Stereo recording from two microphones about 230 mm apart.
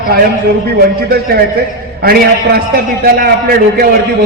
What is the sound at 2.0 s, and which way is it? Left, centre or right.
A man's voice, right.